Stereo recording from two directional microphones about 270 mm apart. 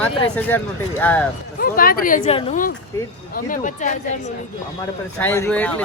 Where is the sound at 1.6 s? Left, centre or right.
Left.